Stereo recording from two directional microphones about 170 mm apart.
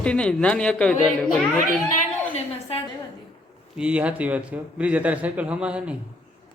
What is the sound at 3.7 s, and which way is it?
A man's voice, 5° right (ahead or behind).